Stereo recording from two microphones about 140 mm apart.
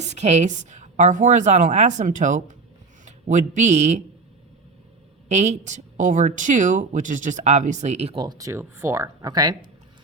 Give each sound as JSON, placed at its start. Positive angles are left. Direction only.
{"t": 0.0, "sound": "speech", "side_deg": -55}
{"t": 5.3, "sound": "speech", "side_deg": -55}
{"t": 8.1, "sound": "speech", "side_deg": -30}